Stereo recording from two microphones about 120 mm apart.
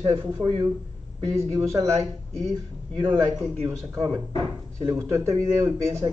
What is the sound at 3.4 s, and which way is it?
Speech, 15° right (ahead or behind).